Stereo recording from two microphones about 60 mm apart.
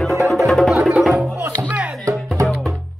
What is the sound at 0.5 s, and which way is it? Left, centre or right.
Music, centre.